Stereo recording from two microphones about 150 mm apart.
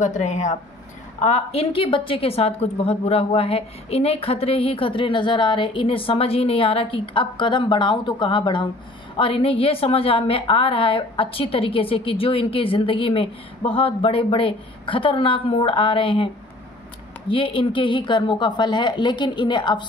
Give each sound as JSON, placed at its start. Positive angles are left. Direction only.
{"t": 0.0, "sound": "speech", "side_deg": 55}
{"t": 1.2, "sound": "a woman's voice", "side_deg": 45}
{"t": 17.3, "sound": "a woman's voice", "side_deg": 35}